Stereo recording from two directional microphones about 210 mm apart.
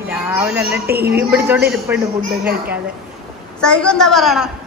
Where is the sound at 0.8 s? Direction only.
50° right (ahead or behind).